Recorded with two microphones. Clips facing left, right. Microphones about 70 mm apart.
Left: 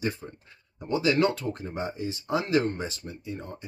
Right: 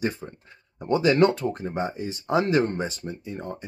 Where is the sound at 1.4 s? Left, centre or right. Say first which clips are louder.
Right 5 dB; right.